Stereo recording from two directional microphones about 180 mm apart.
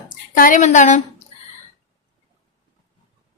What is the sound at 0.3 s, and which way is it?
Speech, 50° left (ahead or behind).